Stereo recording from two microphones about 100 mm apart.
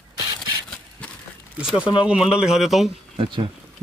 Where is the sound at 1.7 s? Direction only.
55° left (ahead or behind).